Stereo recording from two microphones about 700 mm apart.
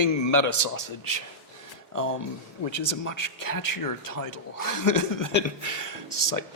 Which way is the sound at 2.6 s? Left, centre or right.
Left.